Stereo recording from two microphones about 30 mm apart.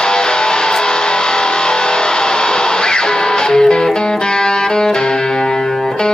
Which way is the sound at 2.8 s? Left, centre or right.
Left.